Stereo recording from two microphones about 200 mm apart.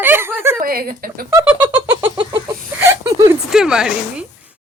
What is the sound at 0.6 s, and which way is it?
Speech, 50° right (ahead or behind).